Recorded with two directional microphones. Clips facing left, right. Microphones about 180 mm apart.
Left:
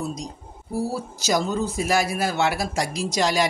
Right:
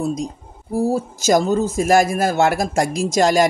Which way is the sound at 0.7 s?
45° right (ahead or behind).